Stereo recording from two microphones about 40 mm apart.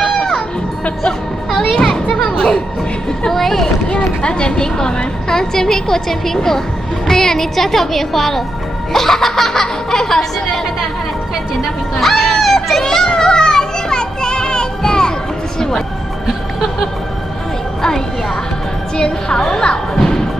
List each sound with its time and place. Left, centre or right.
0.0 s music: centre
1.8 s children playing: centre
3.3 s a woman's voice: centre
3.8 s a woman's voice: left
12.0 s children playing: centre
18.9 s speech: centre